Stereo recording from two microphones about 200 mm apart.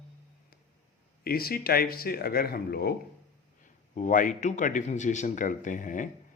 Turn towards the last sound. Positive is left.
turn(degrees=40)  # may be behind; listen again after turning